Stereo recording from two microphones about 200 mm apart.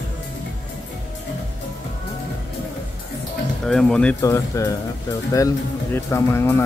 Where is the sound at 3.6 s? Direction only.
5° left (ahead or behind).